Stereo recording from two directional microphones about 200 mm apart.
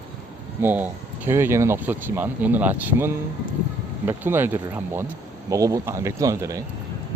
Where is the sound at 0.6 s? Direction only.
10° right (ahead or behind).